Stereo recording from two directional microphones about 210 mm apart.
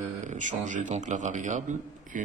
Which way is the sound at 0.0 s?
35° right (ahead or behind).